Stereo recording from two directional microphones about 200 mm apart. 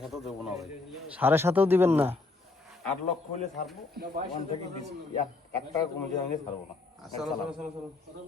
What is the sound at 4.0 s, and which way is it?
Speech, 55° right (ahead or behind).